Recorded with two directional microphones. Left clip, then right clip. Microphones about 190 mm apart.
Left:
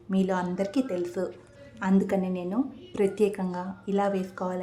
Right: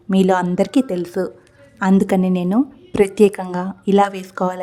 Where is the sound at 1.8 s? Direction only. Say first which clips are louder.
Right 10 dB; 55° right (ahead or behind).